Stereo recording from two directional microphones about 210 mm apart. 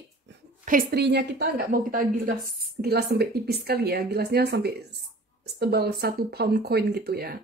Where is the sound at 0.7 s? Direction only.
45° right (ahead or behind).